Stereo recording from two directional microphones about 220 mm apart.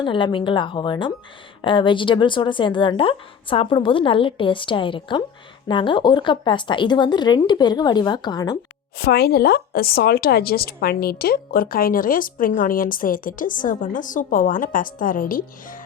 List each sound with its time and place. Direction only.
0.0 s speech: 20° left (ahead or behind)
9.0 s speech: 45° left (ahead or behind)